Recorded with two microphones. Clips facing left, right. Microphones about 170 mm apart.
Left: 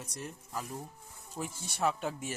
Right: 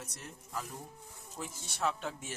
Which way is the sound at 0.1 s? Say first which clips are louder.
Left 3 dB; 15° left (ahead or behind).